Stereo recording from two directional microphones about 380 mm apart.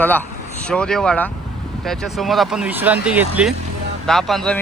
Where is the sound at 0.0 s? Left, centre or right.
Centre.